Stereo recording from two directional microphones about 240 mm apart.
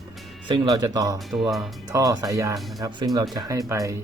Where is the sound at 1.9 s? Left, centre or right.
Centre.